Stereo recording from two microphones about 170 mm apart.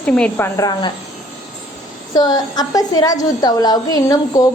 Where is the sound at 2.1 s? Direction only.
25° left (ahead or behind).